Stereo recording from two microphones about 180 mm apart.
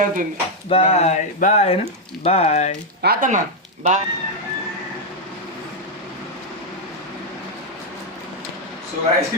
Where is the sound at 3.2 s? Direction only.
45° right (ahead or behind).